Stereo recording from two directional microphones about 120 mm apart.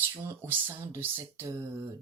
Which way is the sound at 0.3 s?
20° right (ahead or behind).